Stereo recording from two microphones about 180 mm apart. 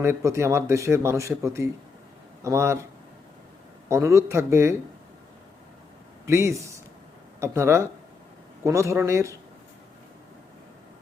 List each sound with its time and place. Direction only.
0.0 s speech: 15° right (ahead or behind)
3.8 s speech: 15° right (ahead or behind)
6.2 s speech: 15° right (ahead or behind)